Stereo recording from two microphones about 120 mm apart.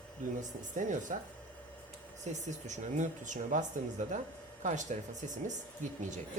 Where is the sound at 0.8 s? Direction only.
90° right.